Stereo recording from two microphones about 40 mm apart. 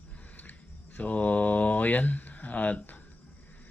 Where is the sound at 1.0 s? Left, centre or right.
Left.